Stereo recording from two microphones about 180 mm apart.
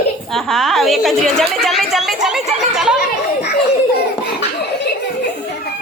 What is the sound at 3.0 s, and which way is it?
Speech, 65° left (ahead or behind).